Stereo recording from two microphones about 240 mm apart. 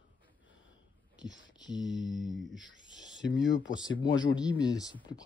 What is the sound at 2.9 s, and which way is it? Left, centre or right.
Speech, left.